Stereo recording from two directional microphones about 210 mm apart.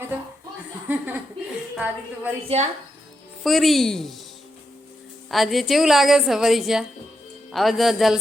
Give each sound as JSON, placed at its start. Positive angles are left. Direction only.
{"t": 0.9, "sound": "a woman's voice", "side_deg": -10}
{"t": 2.5, "sound": "a woman's voice", "side_deg": -30}
{"t": 3.4, "sound": "a woman's voice", "side_deg": 0}
{"t": 5.3, "sound": "a woman's voice", "side_deg": 0}